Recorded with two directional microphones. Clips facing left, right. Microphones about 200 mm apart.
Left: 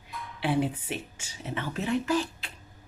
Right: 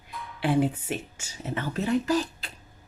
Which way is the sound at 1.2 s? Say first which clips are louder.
Right 2 dB; 45° right (ahead or behind).